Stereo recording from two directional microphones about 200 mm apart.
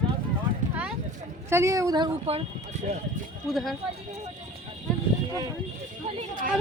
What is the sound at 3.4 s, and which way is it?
Speech, centre (ahead or behind).